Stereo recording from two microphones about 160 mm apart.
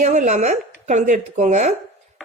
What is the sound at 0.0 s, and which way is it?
A woman's voice, 50° right (ahead or behind).